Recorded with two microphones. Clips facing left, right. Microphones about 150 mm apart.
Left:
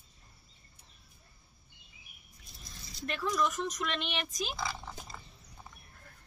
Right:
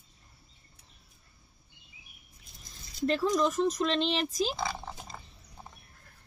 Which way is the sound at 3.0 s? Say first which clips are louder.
Right 6 dB; 30° right (ahead or behind).